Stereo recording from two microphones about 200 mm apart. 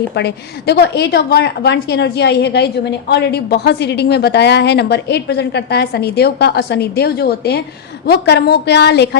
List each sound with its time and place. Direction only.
0.1 s a woman's voice: 55° left (ahead or behind)